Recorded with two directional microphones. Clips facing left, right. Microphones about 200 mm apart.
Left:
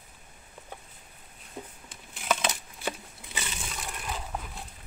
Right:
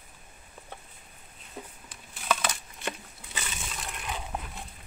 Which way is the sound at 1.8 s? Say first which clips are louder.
Left 1 dB; 25° left (ahead or behind).